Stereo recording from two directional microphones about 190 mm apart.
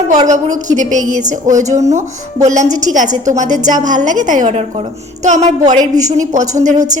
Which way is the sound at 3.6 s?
20° right (ahead or behind).